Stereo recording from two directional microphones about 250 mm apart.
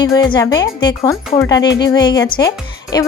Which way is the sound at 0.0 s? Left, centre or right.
Centre.